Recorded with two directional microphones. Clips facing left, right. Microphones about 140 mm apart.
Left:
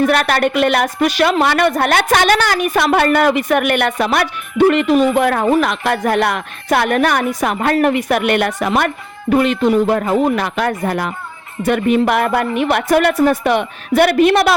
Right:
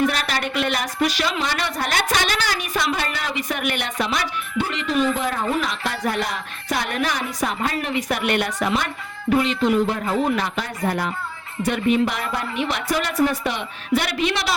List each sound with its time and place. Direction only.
0.0 s speech: 60° left (ahead or behind)